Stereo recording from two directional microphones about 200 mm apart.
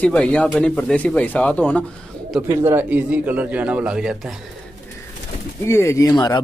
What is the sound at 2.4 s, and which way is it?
Speech, 15° right (ahead or behind).